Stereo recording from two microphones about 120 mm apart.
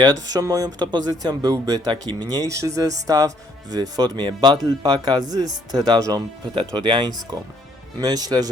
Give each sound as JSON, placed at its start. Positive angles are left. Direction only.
{"t": 0.0, "sound": "speech", "side_deg": -30}